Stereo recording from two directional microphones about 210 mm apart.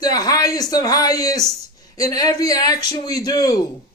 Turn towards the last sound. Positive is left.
turn(degrees=20)  # may be behind; listen again after turning